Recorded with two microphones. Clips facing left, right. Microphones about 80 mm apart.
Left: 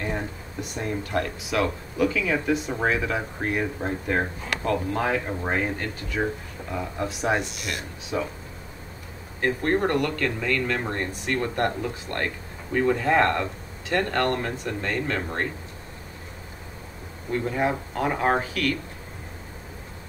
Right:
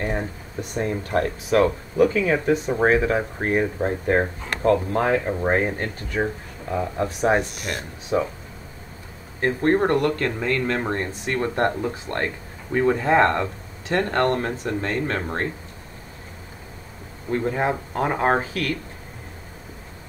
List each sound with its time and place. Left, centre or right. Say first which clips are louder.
0.0 s speech: right 3 dB; right
3.0 s speech: right 5 dB; right
7.1 s speech: right 4 dB; right
9.4 s speech: right 4 dB; right
17.3 s speech: right 2 dB; right